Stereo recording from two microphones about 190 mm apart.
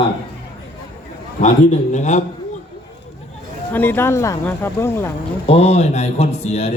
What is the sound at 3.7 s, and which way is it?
Speech, 10° left (ahead or behind).